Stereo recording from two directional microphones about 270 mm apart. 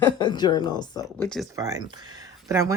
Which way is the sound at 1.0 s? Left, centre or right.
Centre.